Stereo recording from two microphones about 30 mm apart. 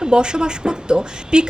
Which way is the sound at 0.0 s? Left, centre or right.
Right.